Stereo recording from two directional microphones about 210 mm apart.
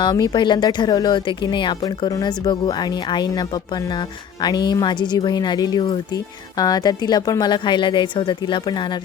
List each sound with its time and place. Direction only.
0.0 s speech: 20° left (ahead or behind)
4.4 s speech: 20° left (ahead or behind)